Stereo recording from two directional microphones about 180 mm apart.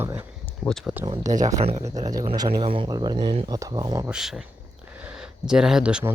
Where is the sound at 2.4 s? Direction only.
30° right (ahead or behind).